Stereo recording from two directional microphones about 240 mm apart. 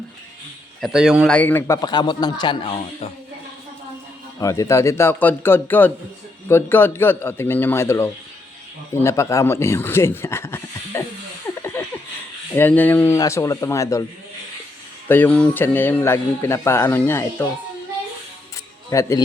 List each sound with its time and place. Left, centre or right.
0.8 s speech: centre
1.4 s a man's voice: centre
4.4 s a man's voice: centre
11.6 s a sound: centre
12.5 s a man's voice: centre
15.0 s a man's voice: centre
18.9 s a man's voice: centre